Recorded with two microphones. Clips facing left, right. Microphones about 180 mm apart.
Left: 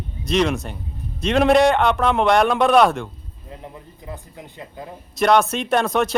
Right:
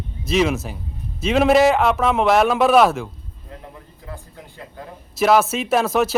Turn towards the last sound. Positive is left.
turn(degrees=-5)  # may be behind; listen again after turning